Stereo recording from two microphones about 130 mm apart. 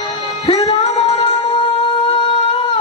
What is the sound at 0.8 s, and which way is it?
Music, 55° left (ahead or behind).